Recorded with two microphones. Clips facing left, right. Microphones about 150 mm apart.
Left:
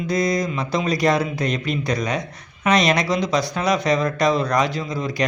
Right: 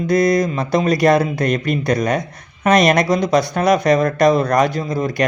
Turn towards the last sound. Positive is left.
turn(degrees=-55)  # may be behind; listen again after turning